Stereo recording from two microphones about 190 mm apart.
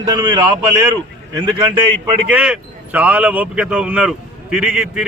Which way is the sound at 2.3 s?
5° right (ahead or behind).